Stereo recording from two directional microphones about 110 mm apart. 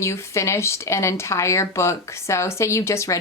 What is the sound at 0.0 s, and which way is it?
Speech, 25° left (ahead or behind).